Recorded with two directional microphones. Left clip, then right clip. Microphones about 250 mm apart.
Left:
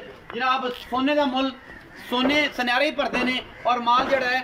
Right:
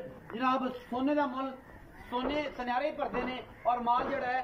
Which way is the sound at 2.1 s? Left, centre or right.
Left.